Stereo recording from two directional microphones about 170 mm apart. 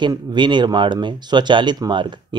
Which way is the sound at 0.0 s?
25° right (ahead or behind).